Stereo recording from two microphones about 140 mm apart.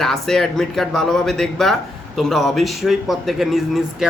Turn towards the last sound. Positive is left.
turn(degrees=0)  # may be behind; listen again after turning